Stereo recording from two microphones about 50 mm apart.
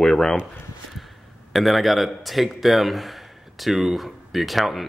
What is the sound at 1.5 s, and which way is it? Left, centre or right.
A man's voice, centre.